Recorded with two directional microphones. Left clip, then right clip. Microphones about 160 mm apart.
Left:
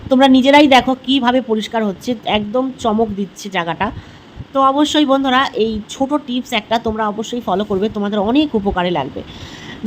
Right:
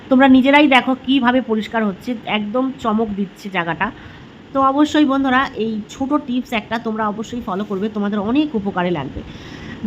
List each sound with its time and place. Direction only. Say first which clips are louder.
0.1 s a woman's voice: left 2 dB; 25° left (ahead or behind)